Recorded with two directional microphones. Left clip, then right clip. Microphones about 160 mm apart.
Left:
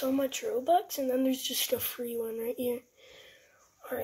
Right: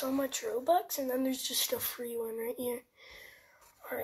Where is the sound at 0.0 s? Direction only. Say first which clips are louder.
Left 3 dB; 40° left (ahead or behind).